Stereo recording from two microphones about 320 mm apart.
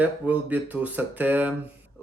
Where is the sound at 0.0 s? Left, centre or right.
Centre.